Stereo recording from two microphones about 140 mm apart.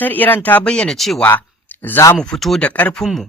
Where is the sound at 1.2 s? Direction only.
15° left (ahead or behind).